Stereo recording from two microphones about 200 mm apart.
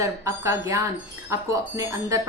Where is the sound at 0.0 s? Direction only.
15° right (ahead or behind).